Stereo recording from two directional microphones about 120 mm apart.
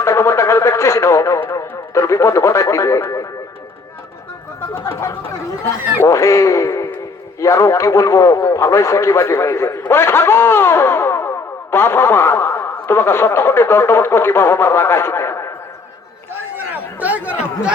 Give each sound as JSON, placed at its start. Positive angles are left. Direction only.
{"t": 0.0, "sound": "speech", "side_deg": 25}
{"t": 4.7, "sound": "a man's voice", "side_deg": 20}
{"t": 17.0, "sound": "speech", "side_deg": -15}